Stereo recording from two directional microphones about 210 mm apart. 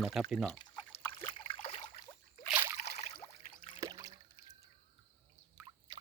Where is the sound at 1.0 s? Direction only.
20° left (ahead or behind).